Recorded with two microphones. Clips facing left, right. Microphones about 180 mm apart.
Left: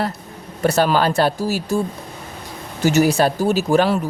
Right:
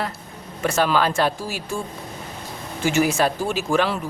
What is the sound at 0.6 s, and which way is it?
Speech, 35° left (ahead or behind).